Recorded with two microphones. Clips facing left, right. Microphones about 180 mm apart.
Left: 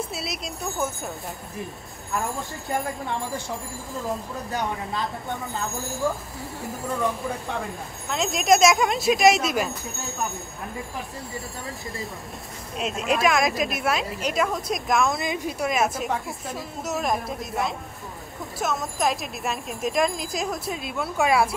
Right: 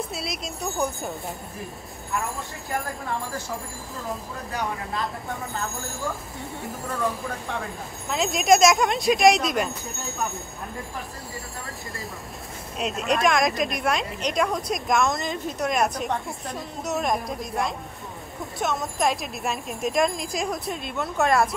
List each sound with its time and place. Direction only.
0.1 s speech: 5° left (ahead or behind)
2.7 s a woman's voice: centre (ahead or behind)
4.6 s a woman's voice: centre (ahead or behind)
8.1 s a woman's voice: centre (ahead or behind)
12.7 s a woman's voice: centre (ahead or behind)